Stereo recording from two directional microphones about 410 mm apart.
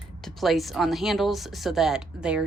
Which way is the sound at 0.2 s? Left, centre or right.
Centre.